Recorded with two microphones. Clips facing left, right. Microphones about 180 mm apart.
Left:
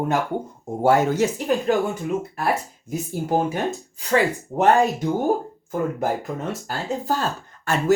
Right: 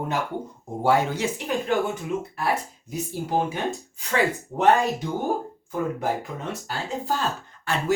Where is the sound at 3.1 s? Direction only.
45° left (ahead or behind).